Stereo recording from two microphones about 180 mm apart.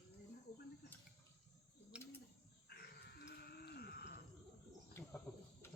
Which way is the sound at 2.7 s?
65° left (ahead or behind).